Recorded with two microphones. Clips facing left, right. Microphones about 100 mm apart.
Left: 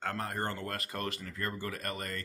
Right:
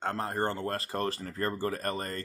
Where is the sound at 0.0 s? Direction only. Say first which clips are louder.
Right 4 dB; 30° right (ahead or behind).